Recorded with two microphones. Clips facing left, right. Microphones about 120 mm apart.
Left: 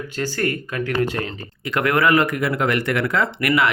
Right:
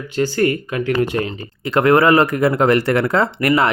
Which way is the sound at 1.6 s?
30° right (ahead or behind).